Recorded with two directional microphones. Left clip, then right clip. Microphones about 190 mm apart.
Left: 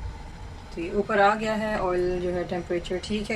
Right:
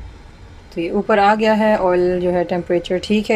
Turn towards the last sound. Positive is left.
turn(degrees=-45)  # may be behind; listen again after turning